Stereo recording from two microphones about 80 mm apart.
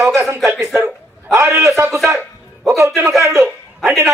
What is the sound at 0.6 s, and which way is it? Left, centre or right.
A man's voice, right.